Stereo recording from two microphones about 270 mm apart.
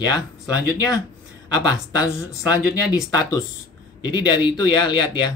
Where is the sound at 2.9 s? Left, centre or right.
Centre.